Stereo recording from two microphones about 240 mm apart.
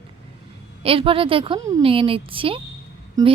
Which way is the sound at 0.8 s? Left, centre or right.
Right.